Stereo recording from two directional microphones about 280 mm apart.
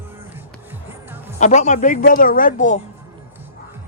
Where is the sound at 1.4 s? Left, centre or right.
Left.